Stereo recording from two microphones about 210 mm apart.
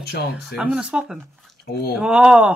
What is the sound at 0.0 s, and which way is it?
Speech, 50° left (ahead or behind).